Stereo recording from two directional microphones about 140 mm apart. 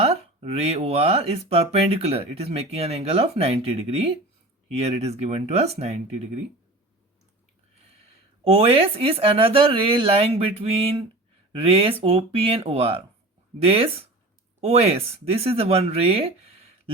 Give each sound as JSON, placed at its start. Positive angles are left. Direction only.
{"t": 0.0, "sound": "speech", "side_deg": -45}
{"t": 8.4, "sound": "speech", "side_deg": -45}